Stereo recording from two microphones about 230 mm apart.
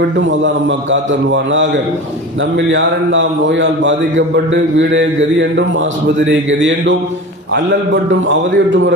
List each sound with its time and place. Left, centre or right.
0.2 s a man's voice: right
8.3 s a man's voice: right